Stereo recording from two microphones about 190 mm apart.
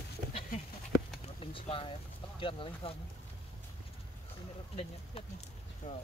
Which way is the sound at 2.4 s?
25° left (ahead or behind).